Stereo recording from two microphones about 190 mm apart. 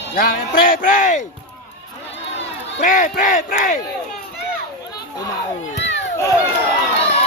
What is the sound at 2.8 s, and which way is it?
Speech, 40° left (ahead or behind).